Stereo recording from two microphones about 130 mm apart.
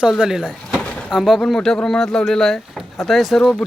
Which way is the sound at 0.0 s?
5° right (ahead or behind).